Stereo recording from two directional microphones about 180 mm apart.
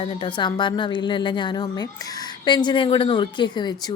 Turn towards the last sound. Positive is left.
turn(degrees=25)  # may be behind; listen again after turning